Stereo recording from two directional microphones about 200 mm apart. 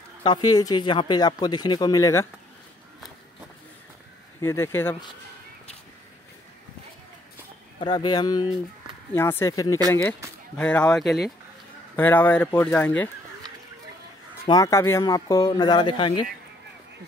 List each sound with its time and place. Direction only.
0.2 s speech: 20° left (ahead or behind)
4.4 s speech: 15° left (ahead or behind)
7.8 s speech: 20° left (ahead or behind)
14.4 s speech: 15° left (ahead or behind)